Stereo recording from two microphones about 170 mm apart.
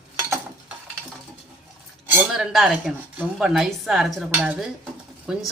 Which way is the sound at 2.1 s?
5° right (ahead or behind).